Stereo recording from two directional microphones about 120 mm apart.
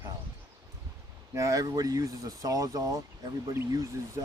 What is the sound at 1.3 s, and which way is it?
Speech, 30° right (ahead or behind).